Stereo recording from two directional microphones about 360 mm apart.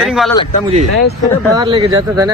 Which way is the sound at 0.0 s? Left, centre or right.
Centre.